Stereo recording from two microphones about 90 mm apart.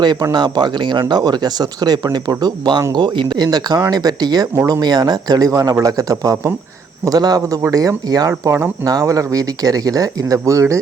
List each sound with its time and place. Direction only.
0.0 s speech: 50° right (ahead or behind)